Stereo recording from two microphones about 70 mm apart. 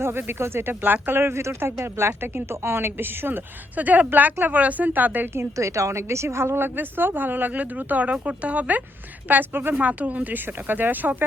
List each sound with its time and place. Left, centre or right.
0.0 s speech: right
5.3 s speech: right
6.7 s speech: right